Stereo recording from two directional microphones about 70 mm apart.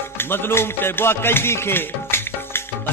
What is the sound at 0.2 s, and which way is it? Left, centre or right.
Music, left.